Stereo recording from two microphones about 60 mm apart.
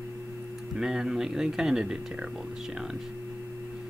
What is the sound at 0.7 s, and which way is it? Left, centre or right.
Speech, centre.